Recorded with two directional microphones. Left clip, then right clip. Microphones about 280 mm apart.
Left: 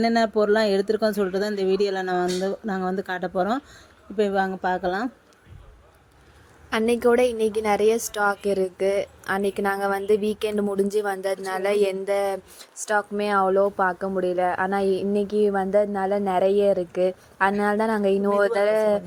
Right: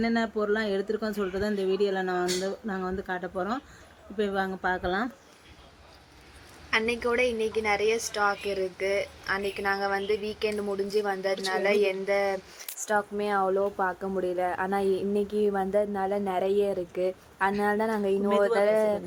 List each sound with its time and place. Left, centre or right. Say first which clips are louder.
0.0 s speech: left 7 dB; left
6.7 s speech: left 6 dB; left
12.8 s speech: left 4 dB; centre